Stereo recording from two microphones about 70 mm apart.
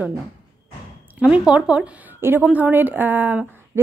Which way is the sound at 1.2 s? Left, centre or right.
Centre.